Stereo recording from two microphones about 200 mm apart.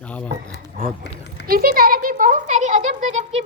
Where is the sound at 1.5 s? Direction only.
50° right (ahead or behind).